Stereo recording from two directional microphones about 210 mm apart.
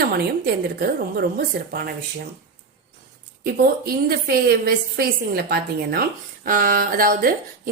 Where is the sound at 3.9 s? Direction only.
45° right (ahead or behind).